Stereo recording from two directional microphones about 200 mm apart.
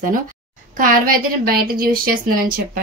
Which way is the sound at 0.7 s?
45° right (ahead or behind).